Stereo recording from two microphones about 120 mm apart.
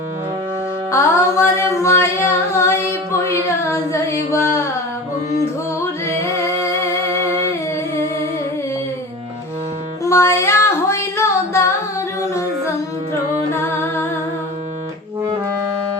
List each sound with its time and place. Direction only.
0.9 s music: 20° left (ahead or behind)
3.7 s carnatic music: 25° left (ahead or behind)
10.0 s music: 25° left (ahead or behind)
13.5 s music: 20° left (ahead or behind)